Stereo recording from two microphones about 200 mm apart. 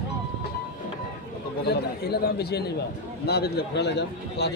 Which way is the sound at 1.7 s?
55° left (ahead or behind).